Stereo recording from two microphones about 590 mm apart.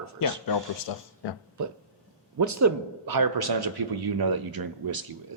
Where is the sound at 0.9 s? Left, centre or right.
Left.